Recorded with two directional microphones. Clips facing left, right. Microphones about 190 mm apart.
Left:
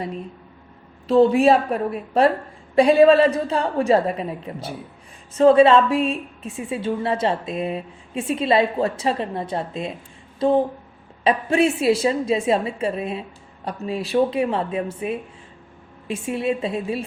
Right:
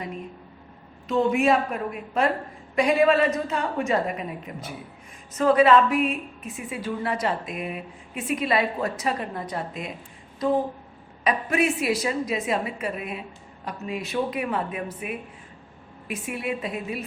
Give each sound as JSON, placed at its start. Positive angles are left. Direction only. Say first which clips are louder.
{"t": 1.0, "sound": "a woman's voice", "louder": "left 6 dB", "side_deg": 35}